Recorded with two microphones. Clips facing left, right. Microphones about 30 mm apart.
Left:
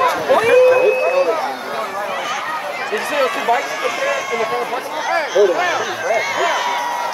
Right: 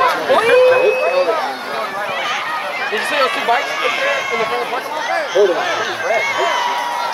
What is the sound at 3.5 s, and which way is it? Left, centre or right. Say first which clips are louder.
Speech: right 2 dB; right.